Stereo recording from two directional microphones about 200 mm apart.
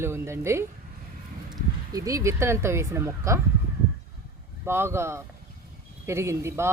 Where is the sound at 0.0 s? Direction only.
10° right (ahead or behind).